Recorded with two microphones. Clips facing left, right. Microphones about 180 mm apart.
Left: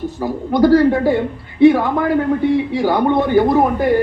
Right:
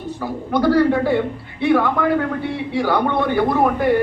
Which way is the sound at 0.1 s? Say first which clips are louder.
Left 3 dB; 40° left (ahead or behind).